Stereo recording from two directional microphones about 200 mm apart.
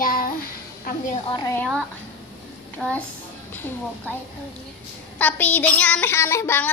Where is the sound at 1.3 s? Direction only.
20° left (ahead or behind).